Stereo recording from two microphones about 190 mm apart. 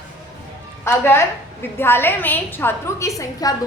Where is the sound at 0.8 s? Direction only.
10° left (ahead or behind).